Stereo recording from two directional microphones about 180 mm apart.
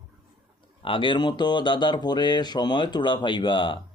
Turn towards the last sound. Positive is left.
turn(degrees=25)  # may be behind; listen again after turning